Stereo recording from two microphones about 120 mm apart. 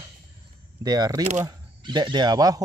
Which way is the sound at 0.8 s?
35° right (ahead or behind).